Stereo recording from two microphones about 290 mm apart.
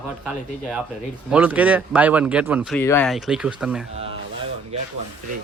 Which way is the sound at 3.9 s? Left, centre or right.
Centre.